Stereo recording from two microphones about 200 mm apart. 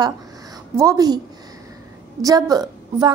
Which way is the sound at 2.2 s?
20° right (ahead or behind).